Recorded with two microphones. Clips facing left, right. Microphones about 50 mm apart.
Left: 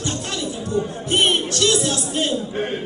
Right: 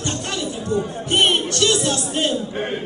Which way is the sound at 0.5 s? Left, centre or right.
Centre.